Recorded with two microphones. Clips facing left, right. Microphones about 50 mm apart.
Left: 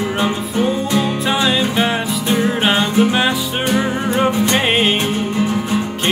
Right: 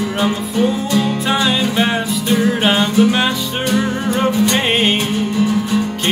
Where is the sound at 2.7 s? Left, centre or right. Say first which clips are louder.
Right 1 dB; centre.